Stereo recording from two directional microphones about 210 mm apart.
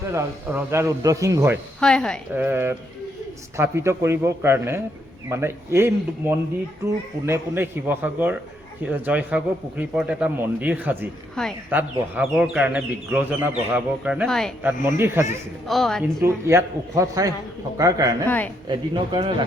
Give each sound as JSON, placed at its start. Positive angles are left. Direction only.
{"t": 0.1, "sound": "a man's voice", "side_deg": -10}
{"t": 1.8, "sound": "speech", "side_deg": 5}
{"t": 2.3, "sound": "a man's voice", "side_deg": -10}
{"t": 11.4, "sound": "speech", "side_deg": 5}
{"t": 11.7, "sound": "a man's voice", "side_deg": -10}
{"t": 14.7, "sound": "a man's voice", "side_deg": -10}
{"t": 15.6, "sound": "speech", "side_deg": 0}
{"t": 16.2, "sound": "a man's voice", "side_deg": -10}
{"t": 18.3, "sound": "speech", "side_deg": 10}
{"t": 18.7, "sound": "speech", "side_deg": -25}